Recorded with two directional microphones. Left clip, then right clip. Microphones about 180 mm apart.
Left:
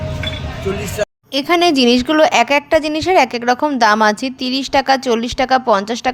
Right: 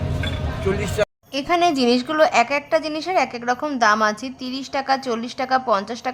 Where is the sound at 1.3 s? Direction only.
30° left (ahead or behind).